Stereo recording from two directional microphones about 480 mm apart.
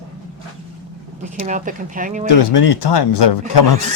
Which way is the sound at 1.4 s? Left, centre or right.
Centre.